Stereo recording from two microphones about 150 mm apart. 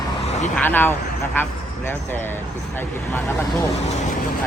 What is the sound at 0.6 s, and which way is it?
Speech, 15° left (ahead or behind).